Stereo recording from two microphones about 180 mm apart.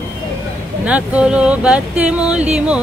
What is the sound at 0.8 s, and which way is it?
Speech, 5° right (ahead or behind).